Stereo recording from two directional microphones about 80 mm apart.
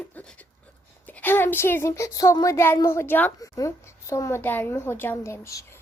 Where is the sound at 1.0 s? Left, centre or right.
Left.